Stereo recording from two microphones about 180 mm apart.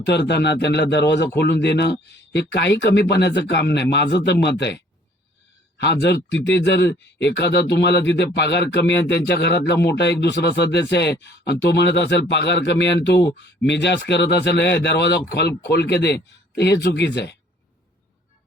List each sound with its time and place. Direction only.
0.0 s speech: 65° left (ahead or behind)
5.8 s speech: 70° left (ahead or behind)